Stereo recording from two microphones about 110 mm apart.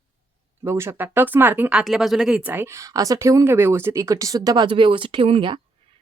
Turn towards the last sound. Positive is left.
turn(degrees=-55)  # may be behind; listen again after turning